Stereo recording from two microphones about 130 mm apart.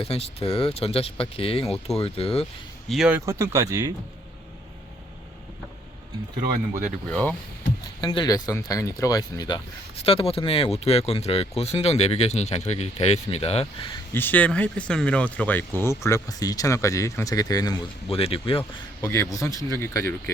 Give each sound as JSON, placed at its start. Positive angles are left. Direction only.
{"t": 0.0, "sound": "speech", "side_deg": 50}
{"t": 2.9, "sound": "speech", "side_deg": -5}
{"t": 3.2, "sound": "speech", "side_deg": -25}
{"t": 7.1, "sound": "speech", "side_deg": 10}
{"t": 8.0, "sound": "speech", "side_deg": 35}
{"t": 10.0, "sound": "speech", "side_deg": 45}
{"t": 14.1, "sound": "speech", "side_deg": 15}
{"t": 18.1, "sound": "speech", "side_deg": 45}
{"t": 19.0, "sound": "speech", "side_deg": 20}